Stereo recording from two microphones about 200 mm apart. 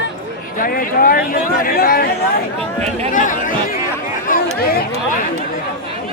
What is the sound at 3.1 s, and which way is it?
Speech, 40° left (ahead or behind).